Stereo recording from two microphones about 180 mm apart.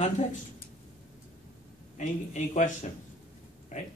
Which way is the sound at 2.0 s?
40° left (ahead or behind).